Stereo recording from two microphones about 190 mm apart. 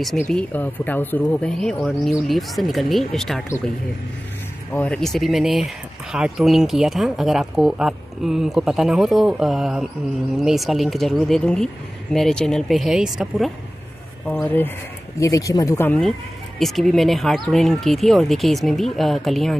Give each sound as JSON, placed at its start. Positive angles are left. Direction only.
{"t": 0.3, "sound": "speech", "side_deg": 5}
{"t": 4.7, "sound": "speech", "side_deg": 5}